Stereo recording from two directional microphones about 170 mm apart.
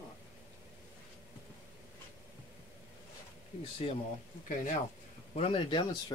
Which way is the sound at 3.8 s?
35° left (ahead or behind).